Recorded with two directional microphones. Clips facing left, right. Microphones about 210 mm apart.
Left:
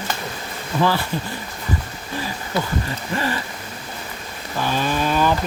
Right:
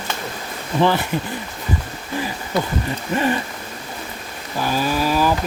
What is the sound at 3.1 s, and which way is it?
Rain, 20° right (ahead or behind).